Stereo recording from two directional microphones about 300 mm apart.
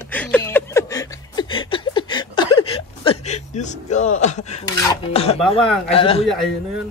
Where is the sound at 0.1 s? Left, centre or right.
Centre; by 4.6 s left.